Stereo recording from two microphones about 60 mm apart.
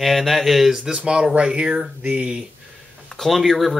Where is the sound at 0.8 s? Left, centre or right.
Centre.